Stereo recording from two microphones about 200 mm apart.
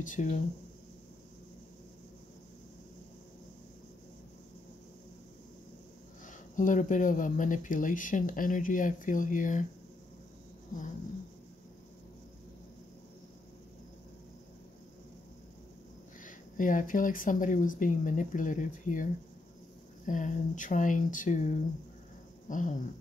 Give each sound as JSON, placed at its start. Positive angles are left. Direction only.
{"t": 0.0, "sound": "speech", "side_deg": 40}
{"t": 6.2, "sound": "speech", "side_deg": 40}
{"t": 16.3, "sound": "speech", "side_deg": 40}
{"t": 20.1, "sound": "speech", "side_deg": 40}